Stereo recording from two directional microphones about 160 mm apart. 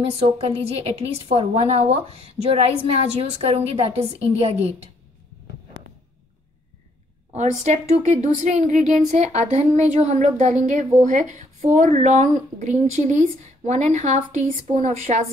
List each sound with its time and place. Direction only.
0.1 s a woman's voice: 40° right (ahead or behind)
7.3 s speech: 45° right (ahead or behind)